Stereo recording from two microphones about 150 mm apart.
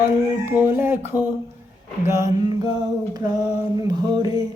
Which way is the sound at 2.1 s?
25° right (ahead or behind).